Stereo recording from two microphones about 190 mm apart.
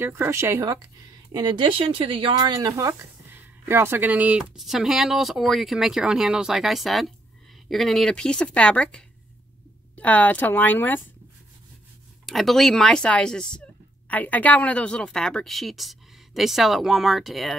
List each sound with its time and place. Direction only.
0.0 s a woman's voice: 10° right (ahead or behind); by 11.0 s 10° left (ahead or behind)
12.3 s speech: centre (ahead or behind)